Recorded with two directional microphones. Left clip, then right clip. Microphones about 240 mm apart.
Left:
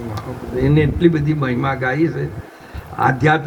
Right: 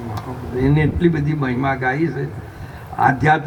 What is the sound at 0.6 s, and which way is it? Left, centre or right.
Speech, centre.